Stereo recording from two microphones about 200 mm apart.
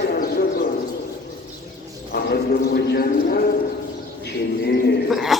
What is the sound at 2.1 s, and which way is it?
Speech, 50° left (ahead or behind).